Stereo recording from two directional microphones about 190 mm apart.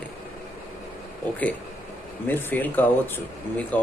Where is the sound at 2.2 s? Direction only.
10° left (ahead or behind).